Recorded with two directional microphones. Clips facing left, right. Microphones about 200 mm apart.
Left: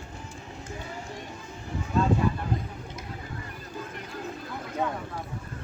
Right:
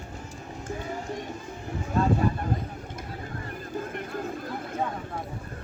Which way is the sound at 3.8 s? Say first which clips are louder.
Right 5 dB; 50° right (ahead or behind).